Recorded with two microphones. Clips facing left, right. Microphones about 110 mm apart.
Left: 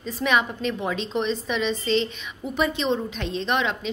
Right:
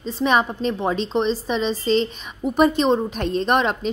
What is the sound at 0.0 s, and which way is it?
A woman's voice, 35° right (ahead or behind).